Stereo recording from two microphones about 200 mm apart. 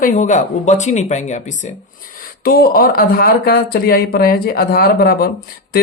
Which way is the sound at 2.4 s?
50° left (ahead or behind).